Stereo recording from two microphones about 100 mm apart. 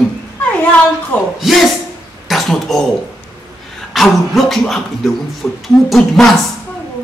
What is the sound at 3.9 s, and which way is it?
Speech, centre (ahead or behind).